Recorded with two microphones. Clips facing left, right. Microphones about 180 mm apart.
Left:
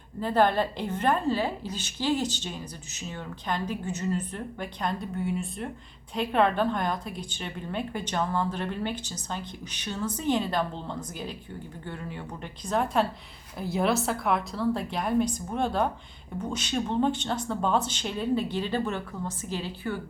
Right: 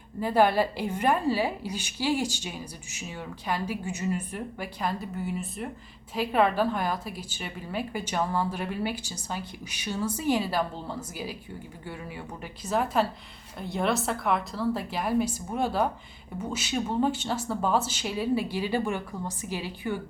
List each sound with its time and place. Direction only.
0.2 s a woman's voice: 10° right (ahead or behind)